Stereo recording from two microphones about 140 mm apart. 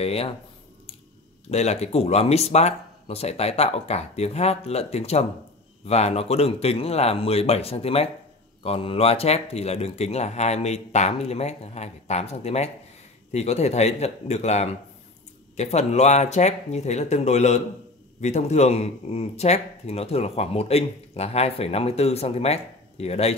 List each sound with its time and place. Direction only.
0.0 s speech: 45° left (ahead or behind)
1.5 s speech: 50° left (ahead or behind)